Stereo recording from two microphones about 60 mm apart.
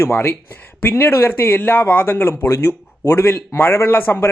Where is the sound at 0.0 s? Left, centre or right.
Left.